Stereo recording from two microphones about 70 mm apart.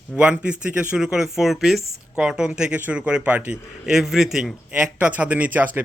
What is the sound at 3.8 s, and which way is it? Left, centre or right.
Speech, centre.